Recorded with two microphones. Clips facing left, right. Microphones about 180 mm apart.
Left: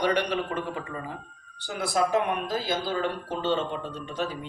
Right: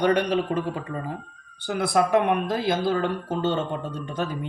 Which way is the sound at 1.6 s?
60° right (ahead or behind).